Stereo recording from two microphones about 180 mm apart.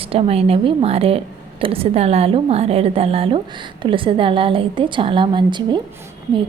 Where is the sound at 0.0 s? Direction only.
30° right (ahead or behind).